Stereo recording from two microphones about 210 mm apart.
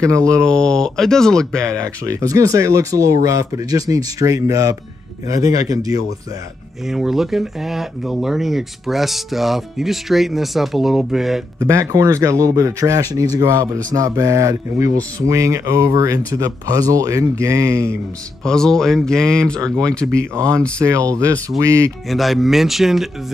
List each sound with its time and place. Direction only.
0.0 s speech: 15° right (ahead or behind)
0.5 s speech: 5° left (ahead or behind)
1.6 s speech: 15° right (ahead or behind)
6.9 s speech: centre (ahead or behind)
11.6 s speech: 15° right (ahead or behind)
18.4 s speech: 5° left (ahead or behind)
20.8 s speech: 15° right (ahead or behind)
22.1 s speech: centre (ahead or behind)